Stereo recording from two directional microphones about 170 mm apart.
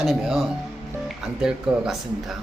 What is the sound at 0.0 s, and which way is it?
Speech, centre (ahead or behind).